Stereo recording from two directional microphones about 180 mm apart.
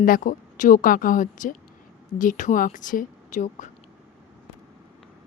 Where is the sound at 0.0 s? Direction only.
50° left (ahead or behind).